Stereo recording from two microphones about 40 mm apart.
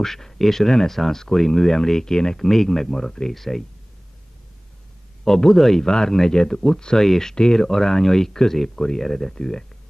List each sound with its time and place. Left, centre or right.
0.0 s speech: centre
5.2 s speech: centre